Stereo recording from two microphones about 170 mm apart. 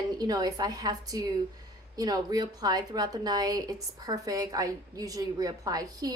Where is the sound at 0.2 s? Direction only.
25° right (ahead or behind).